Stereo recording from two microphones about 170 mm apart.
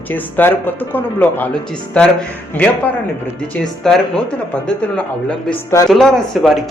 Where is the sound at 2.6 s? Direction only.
5° left (ahead or behind).